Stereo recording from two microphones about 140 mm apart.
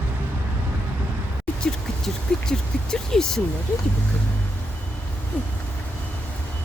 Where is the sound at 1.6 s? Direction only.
5° left (ahead or behind).